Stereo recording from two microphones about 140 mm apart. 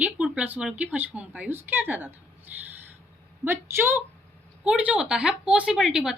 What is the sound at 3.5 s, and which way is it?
A woman's voice, 15° right (ahead or behind).